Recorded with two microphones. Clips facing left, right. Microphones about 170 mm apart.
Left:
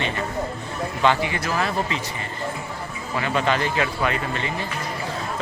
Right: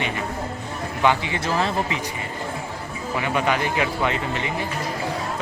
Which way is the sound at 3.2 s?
15° right (ahead or behind).